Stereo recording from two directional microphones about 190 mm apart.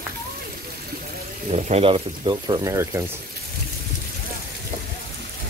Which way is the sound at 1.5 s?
35° right (ahead or behind).